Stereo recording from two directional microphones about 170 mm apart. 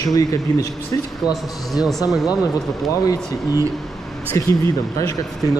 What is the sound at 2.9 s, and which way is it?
A man's voice, 20° left (ahead or behind).